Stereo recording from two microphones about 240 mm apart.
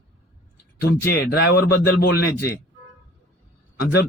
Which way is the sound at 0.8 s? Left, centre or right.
Left.